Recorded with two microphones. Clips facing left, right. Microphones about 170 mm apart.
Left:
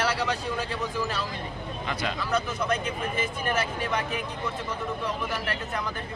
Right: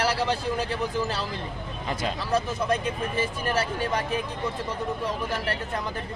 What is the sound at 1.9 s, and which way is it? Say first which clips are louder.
A man's voice: right 2 dB; 35° right (ahead or behind).